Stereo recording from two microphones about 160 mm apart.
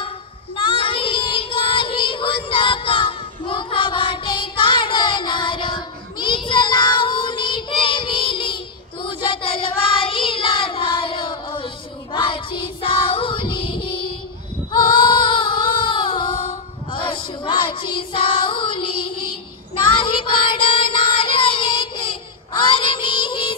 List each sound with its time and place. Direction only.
0.6 s child singing: 30° left (ahead or behind)
14.7 s female singing: 30° left (ahead or behind)
19.7 s child singing: 30° left (ahead or behind)